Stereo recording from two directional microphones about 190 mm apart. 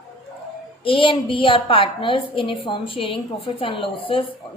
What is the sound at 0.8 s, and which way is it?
A woman's voice, 25° left (ahead or behind).